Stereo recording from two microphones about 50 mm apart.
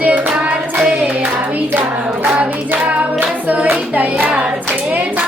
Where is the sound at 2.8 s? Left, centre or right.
Right.